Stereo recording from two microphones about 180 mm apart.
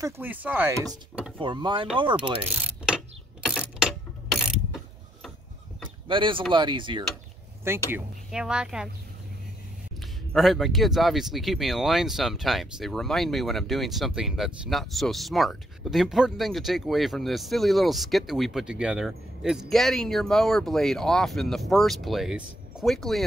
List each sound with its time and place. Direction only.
0.0 s speech: 10° right (ahead or behind)
1.4 s speech: 25° right (ahead or behind)
3.8 s mechanisms: centre (ahead or behind)
6.0 s speech: 30° right (ahead or behind)
7.7 s speech: 15° right (ahead or behind)
10.3 s speech: centre (ahead or behind)